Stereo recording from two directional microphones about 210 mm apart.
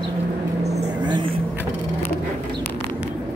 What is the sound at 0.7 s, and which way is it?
Vehicle, 25° right (ahead or behind).